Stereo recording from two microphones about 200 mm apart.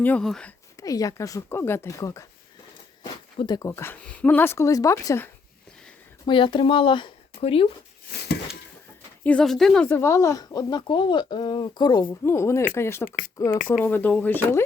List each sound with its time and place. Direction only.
0.0 s speech: 5° left (ahead or behind)
0.8 s speech: 15° left (ahead or behind)
6.2 s speech: 25° left (ahead or behind)
9.2 s speech: 5° left (ahead or behind)
13.1 s speech: 45° left (ahead or behind)
13.8 s speech: 10° left (ahead or behind)